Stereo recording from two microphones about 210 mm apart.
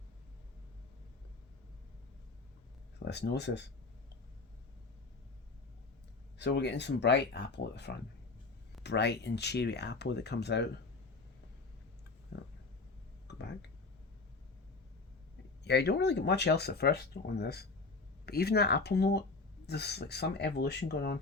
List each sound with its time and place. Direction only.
3.0 s speech: 55° left (ahead or behind)
6.4 s speech: 55° left (ahead or behind)
13.2 s a sound: 55° left (ahead or behind)
15.6 s speech: 50° left (ahead or behind)